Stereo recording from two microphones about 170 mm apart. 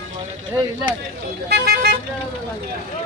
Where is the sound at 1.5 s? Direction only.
70° right (ahead or behind).